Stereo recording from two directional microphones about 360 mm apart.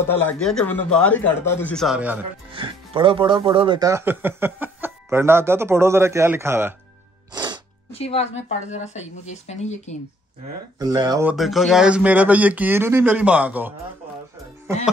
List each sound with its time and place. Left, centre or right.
0.0 s a man's voice: centre
7.3 s music: centre
7.9 s speech: centre
10.8 s speech: centre